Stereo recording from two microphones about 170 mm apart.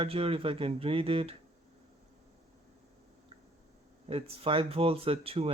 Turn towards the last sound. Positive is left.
turn(degrees=-35)  # may be behind; listen again after turning